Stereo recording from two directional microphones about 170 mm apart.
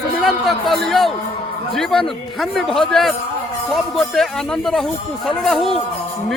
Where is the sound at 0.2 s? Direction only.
Centre (ahead or behind).